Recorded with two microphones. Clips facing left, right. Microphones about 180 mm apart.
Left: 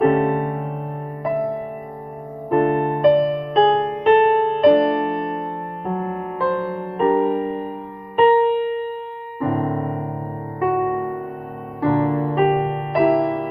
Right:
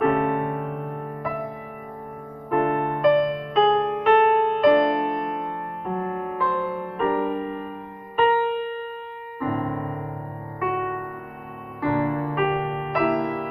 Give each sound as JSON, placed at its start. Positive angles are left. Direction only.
{"t": 0.0, "sound": "music", "side_deg": 35}
{"t": 2.5, "sound": "music", "side_deg": 35}
{"t": 11.8, "sound": "music", "side_deg": 35}